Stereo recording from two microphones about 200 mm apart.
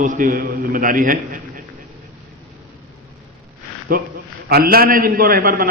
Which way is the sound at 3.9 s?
45° right (ahead or behind).